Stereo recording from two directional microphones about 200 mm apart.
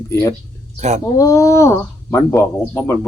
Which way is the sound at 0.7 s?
35° right (ahead or behind).